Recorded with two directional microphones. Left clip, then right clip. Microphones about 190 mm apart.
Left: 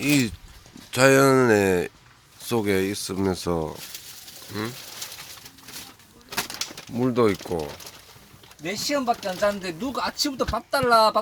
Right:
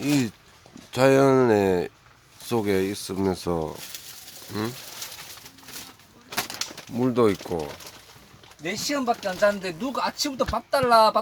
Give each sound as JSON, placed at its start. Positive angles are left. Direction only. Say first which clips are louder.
{"t": 0.0, "sound": "speech", "louder": "left 2 dB", "side_deg": 0}
{"t": 6.3, "sound": "bird", "louder": "even", "side_deg": -5}
{"t": 7.4, "sound": "speech", "louder": "left 1 dB", "side_deg": 10}
{"t": 8.6, "sound": "speech", "louder": "left 1 dB", "side_deg": -5}